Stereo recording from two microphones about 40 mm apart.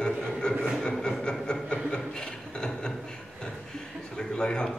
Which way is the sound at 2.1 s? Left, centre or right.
Left.